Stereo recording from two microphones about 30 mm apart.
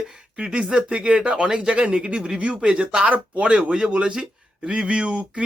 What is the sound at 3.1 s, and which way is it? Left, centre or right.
Speech, right.